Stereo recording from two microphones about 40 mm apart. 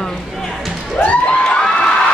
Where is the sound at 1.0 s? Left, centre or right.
Left.